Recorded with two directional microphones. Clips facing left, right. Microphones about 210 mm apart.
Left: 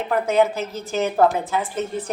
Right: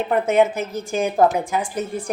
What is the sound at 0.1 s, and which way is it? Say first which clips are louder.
A woman's voice: right 1 dB; 20° right (ahead or behind).